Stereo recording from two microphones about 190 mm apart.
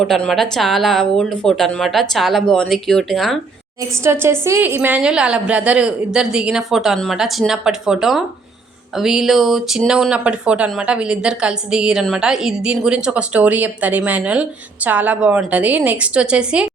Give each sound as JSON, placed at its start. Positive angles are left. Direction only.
{"t": 0.0, "sound": "speech", "side_deg": 0}
{"t": 4.0, "sound": "a woman's voice", "side_deg": -15}